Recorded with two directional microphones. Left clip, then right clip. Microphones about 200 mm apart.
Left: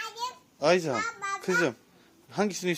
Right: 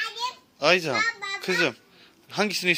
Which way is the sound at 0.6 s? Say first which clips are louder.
Right 4 dB; 15° left (ahead or behind).